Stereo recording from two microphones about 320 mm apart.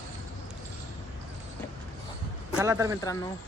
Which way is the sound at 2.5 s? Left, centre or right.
Centre.